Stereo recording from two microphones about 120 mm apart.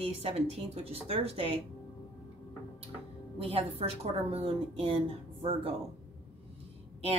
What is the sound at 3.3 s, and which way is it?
Speech, 55° right (ahead or behind).